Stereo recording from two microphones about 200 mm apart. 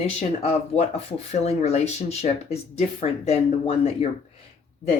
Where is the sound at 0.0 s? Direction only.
30° left (ahead or behind).